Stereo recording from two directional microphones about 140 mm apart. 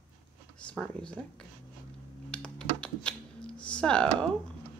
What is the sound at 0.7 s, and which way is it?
Speech, 10° left (ahead or behind).